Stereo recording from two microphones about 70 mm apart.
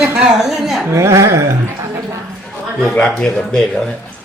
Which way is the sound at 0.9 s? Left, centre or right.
Right.